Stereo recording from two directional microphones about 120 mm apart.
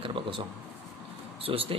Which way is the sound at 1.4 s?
50° right (ahead or behind).